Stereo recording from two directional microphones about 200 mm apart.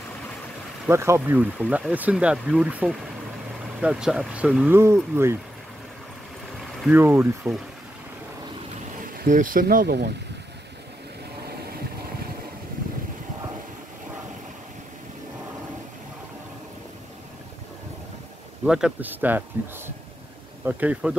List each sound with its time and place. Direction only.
0.8 s speech: 15° right (ahead or behind)
6.8 s speech: 10° right (ahead or behind)
9.1 s speech: 45° right (ahead or behind)
18.7 s speech: 5° right (ahead or behind)
20.6 s speech: 5° right (ahead or behind)